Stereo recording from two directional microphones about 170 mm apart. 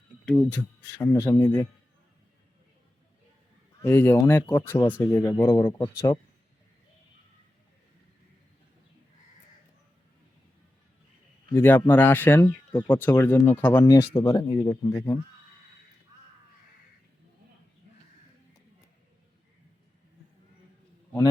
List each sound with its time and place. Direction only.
0.3 s speech: 5° left (ahead or behind)
3.8 s speech: 15° left (ahead or behind)
11.5 s speech: 10° left (ahead or behind)